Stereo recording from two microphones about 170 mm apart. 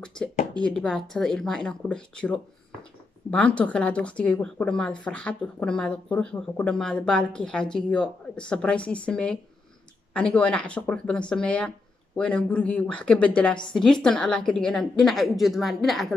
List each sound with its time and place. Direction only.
0.6 s speech: 5° left (ahead or behind)